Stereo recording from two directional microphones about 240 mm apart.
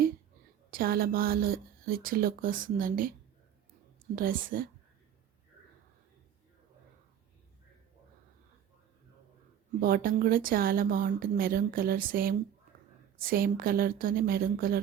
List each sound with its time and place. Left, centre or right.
0.7 s speech: right
4.1 s speech: right
9.8 s speech: right